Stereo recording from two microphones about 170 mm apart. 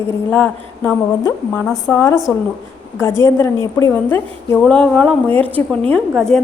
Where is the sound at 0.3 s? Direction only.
5° left (ahead or behind).